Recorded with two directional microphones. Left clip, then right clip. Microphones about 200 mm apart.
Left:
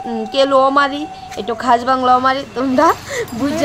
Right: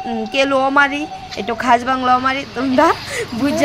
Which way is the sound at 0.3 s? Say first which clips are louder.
Left 4 dB; 35° right (ahead or behind).